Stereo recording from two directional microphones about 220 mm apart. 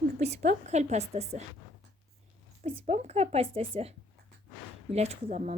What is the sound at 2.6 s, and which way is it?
Speech, 30° right (ahead or behind).